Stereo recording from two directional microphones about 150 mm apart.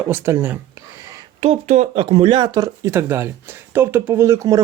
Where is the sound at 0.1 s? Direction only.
15° right (ahead or behind).